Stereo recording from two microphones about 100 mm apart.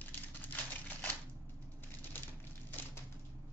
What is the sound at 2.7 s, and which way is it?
Typewriter, 20° left (ahead or behind).